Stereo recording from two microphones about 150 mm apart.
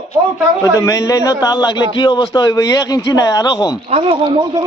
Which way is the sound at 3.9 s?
40° right (ahead or behind).